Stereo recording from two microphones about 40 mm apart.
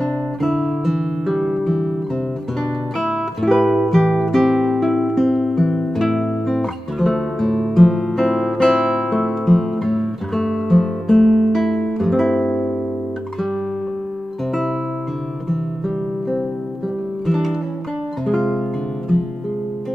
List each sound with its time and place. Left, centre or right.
0.4 s guitar: centre
3.4 s music: centre
6.2 s guitar: centre
9.2 s music: centre
10.3 s guitar: centre
12.4 s music: left
17.3 s music: centre